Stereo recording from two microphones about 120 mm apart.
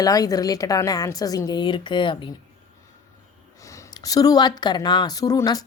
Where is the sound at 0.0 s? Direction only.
30° left (ahead or behind).